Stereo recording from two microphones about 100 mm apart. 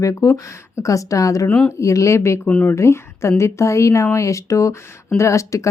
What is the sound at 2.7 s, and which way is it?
Speech, 30° left (ahead or behind).